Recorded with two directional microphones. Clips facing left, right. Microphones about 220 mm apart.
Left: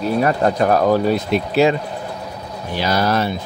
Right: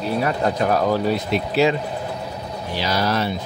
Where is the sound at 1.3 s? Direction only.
50° left (ahead or behind).